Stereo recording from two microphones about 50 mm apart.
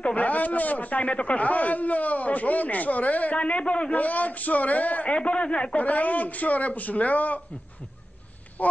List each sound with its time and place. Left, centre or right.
0.0 s speech: left
5.8 s speech: left
8.6 s a sound: left